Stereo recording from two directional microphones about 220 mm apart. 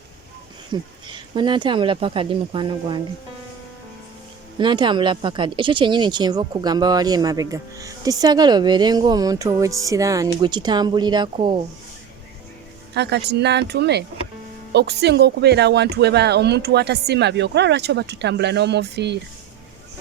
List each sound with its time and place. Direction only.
0.7 s speech: 20° right (ahead or behind)
4.5 s speech: 20° right (ahead or behind)
12.9 s speech: 50° right (ahead or behind)